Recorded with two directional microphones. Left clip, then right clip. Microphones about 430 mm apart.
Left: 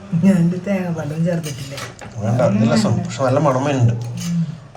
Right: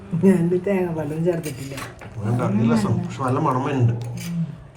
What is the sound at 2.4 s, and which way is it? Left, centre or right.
Speech, centre.